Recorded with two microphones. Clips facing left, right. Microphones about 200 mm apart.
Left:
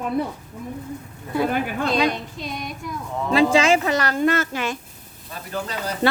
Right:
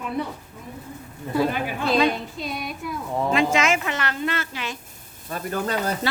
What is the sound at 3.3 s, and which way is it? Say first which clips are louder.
Speech: left 6 dB; 30° left (ahead or behind).